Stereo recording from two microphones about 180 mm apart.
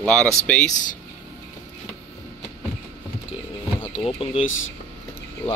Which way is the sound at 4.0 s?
30° left (ahead or behind).